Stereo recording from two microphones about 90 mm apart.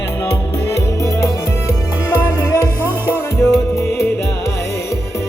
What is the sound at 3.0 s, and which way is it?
Music, 30° left (ahead or behind).